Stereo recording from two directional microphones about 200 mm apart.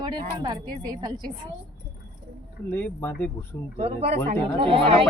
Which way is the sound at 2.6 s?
10° left (ahead or behind).